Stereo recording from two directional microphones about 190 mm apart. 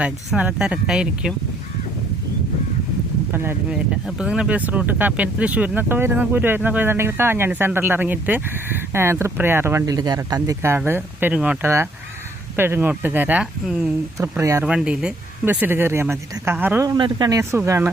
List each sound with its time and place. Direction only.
0.0 s speech: 5° right (ahead or behind)
3.3 s speech: 10° right (ahead or behind)
14.2 s speech: 15° right (ahead or behind)
17.0 s speech: 20° right (ahead or behind)